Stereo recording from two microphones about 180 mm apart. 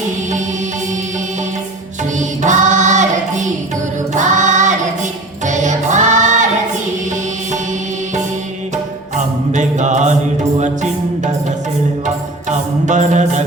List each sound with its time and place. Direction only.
2.1 s music: 40° right (ahead or behind)
4.1 s choir: 45° right (ahead or behind)
5.5 s music: 45° right (ahead or behind)
9.1 s mantra: 40° right (ahead or behind)
12.0 s music: 40° right (ahead or behind)